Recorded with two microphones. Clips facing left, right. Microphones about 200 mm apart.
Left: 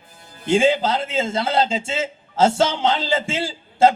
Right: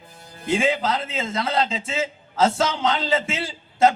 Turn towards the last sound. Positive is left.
turn(degrees=30)  # may be behind; listen again after turning